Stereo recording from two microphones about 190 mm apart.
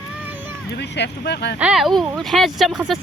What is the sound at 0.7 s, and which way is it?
Speech, 65° left (ahead or behind).